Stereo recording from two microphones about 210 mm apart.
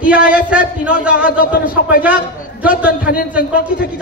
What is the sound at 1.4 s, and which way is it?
Speech, 45° left (ahead or behind).